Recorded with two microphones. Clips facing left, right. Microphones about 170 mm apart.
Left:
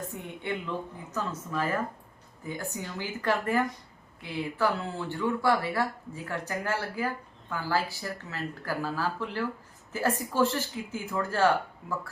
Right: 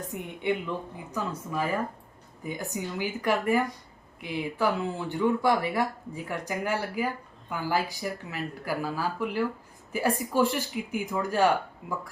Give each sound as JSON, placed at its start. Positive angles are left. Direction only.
{"t": 0.1, "sound": "speech", "side_deg": -15}